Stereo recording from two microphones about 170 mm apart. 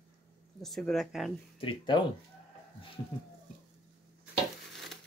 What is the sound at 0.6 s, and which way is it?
Speech, centre (ahead or behind).